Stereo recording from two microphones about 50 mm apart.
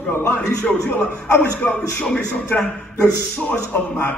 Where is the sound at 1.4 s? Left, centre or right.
Left.